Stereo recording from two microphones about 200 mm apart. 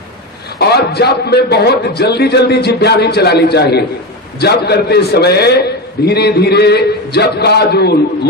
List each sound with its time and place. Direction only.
0.6 s a man's voice: 55° left (ahead or behind)